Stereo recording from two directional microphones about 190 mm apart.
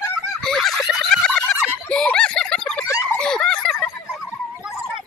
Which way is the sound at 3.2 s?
5° left (ahead or behind).